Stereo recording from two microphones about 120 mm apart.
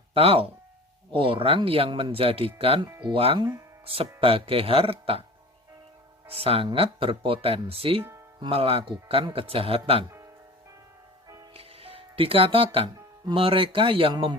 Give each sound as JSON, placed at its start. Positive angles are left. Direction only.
{"t": 0.1, "sound": "speech", "side_deg": -55}
{"t": 6.2, "sound": "speech", "side_deg": -55}
{"t": 11.5, "sound": "speech", "side_deg": -55}